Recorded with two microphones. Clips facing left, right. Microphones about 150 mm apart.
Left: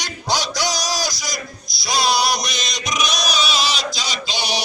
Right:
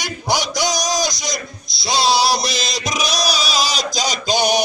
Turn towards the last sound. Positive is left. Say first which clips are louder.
# right 7 dB
turn(degrees=-45)  # may be behind; listen again after turning